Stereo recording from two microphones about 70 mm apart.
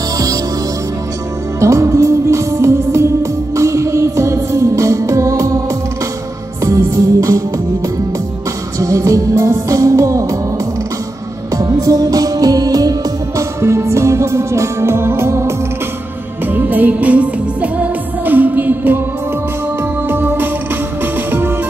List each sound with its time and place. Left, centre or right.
1.6 s music: right
6.6 s music: right
8.7 s music: right
11.5 s music: right
13.4 s music: right
16.5 s music: right
20.1 s music: right